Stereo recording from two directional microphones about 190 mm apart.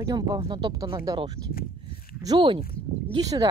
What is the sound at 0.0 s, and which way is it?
Speech, 20° right (ahead or behind).